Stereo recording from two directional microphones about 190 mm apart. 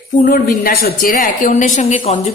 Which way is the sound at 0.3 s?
50° left (ahead or behind).